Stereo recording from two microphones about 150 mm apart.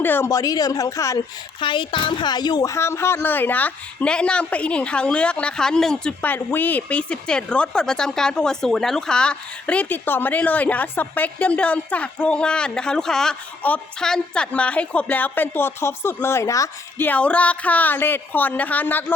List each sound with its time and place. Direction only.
0.0 s a woman's voice: 15° left (ahead or behind)
1.6 s a woman's voice: 35° left (ahead or behind); by 19.1 s 10° left (ahead or behind)